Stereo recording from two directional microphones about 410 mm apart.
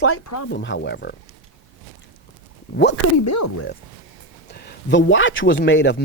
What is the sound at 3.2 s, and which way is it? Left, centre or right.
Speech, left.